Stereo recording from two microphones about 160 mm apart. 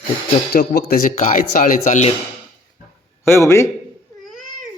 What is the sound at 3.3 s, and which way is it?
Speech, 15° left (ahead or behind).